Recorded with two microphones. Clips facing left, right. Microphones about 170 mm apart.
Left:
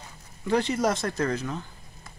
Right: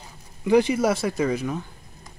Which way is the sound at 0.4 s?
10° right (ahead or behind).